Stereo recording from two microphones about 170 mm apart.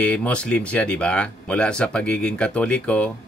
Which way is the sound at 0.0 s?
5° left (ahead or behind).